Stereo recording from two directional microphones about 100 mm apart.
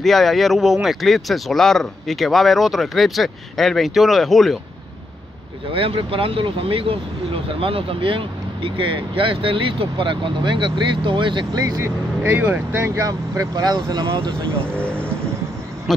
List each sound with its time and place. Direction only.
0.0 s speech: centre (ahead or behind)
5.7 s speech: 60° right (ahead or behind)
11.6 s speech: 35° right (ahead or behind)
12.2 s speech: 20° right (ahead or behind); by 14.3 s 55° right (ahead or behind)
14.6 s speech: 10° left (ahead or behind)